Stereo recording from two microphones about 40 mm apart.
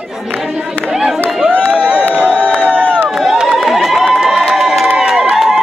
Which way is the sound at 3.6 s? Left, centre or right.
Centre.